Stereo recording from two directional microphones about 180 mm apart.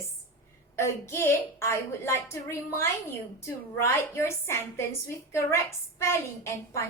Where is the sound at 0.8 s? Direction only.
15° left (ahead or behind).